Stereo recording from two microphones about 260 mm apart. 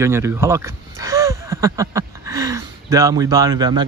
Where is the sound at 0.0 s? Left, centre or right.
Centre.